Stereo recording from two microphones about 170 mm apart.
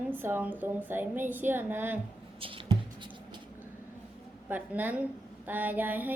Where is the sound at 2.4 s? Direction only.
30° right (ahead or behind).